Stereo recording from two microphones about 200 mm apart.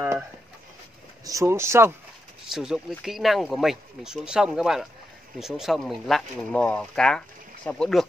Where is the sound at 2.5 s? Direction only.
Centre (ahead or behind).